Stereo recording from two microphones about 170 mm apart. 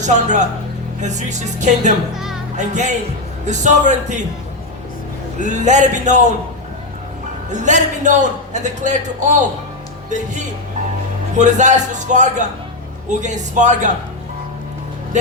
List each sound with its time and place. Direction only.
0.0 s speech: 45° right (ahead or behind)
2.1 s music: centre (ahead or behind)
2.6 s speech: 45° right (ahead or behind)
5.4 s speech: 45° right (ahead or behind)
7.5 s speech: 45° right (ahead or behind)
11.3 s speech: 45° right (ahead or behind)